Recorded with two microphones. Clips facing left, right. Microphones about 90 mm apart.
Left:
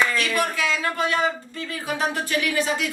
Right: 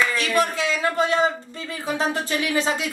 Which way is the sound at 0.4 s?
25° right (ahead or behind).